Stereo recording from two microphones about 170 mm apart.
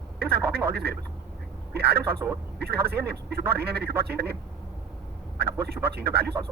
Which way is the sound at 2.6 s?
70° right (ahead or behind).